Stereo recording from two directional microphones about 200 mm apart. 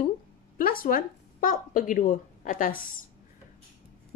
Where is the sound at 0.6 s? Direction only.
45° left (ahead or behind).